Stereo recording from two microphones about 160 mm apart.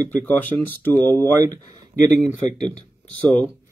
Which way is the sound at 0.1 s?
10° left (ahead or behind).